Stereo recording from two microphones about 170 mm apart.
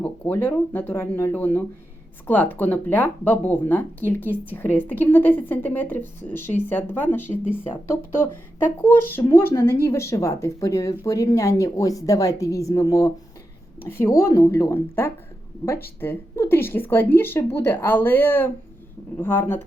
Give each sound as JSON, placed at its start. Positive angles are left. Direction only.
{"t": 0.0, "sound": "speech", "side_deg": 10}